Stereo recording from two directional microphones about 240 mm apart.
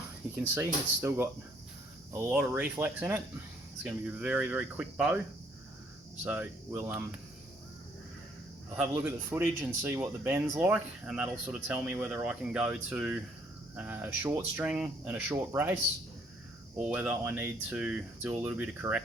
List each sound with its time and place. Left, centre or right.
0.5 s speech: centre
6.2 s speech: centre
8.7 s speech: centre